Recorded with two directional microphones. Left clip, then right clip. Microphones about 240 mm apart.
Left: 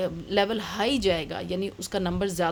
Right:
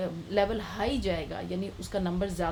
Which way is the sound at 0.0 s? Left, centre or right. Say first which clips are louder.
Left 3 dB; left.